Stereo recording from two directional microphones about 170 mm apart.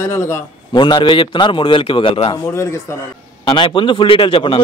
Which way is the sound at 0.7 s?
25° left (ahead or behind).